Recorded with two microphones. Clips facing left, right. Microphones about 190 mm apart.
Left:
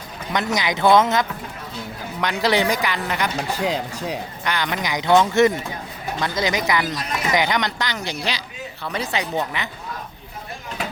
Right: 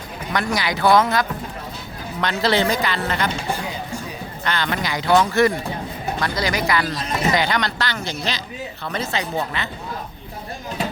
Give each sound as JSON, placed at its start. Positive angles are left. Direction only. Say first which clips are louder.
{"t": 0.3, "sound": "speech", "louder": "even", "side_deg": 20}
{"t": 3.6, "sound": "speech", "louder": "left 5 dB", "side_deg": 85}
{"t": 4.4, "sound": "speech", "louder": "right 1 dB", "side_deg": 15}